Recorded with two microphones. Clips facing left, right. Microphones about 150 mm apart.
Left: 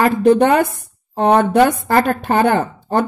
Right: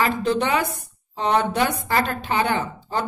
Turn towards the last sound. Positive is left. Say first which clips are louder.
# left 8 dB
turn(degrees=50)  # may be behind; listen again after turning